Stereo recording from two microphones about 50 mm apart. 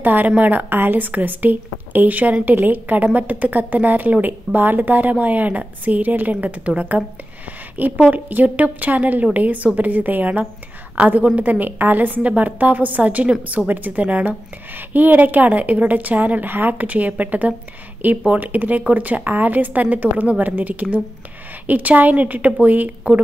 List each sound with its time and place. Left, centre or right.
0.0 s a woman's voice: right
7.8 s a woman's voice: right